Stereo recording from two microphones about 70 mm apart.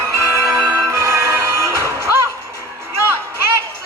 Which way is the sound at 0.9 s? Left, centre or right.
Right.